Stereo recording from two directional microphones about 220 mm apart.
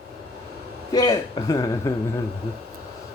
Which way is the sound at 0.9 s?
15° left (ahead or behind).